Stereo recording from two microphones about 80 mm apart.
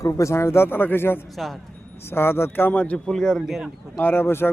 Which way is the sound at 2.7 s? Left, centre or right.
Centre.